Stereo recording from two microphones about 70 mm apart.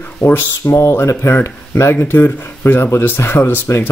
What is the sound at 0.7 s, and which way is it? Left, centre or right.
Speech, left.